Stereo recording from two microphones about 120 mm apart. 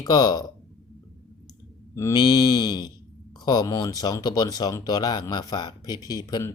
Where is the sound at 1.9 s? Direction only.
30° left (ahead or behind).